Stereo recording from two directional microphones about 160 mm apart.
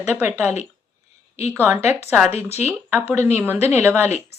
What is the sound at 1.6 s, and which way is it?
Speech, 15° right (ahead or behind).